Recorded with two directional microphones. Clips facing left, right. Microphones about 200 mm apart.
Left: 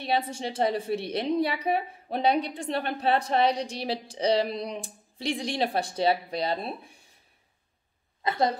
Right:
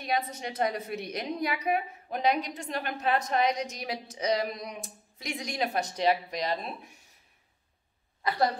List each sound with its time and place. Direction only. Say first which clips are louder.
0.0 s a woman's voice: left 3 dB; 30° left (ahead or behind)
8.2 s speech: left 2 dB; 25° left (ahead or behind)